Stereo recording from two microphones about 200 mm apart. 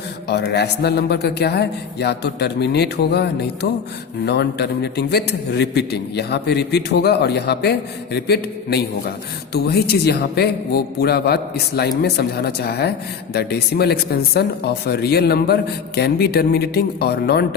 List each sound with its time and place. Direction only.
0.3 s a man's voice: 55° left (ahead or behind)